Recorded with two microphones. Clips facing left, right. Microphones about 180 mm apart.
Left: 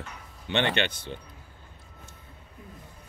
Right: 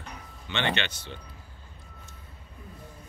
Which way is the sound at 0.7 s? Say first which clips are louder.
Left 5 dB; 50° left (ahead or behind).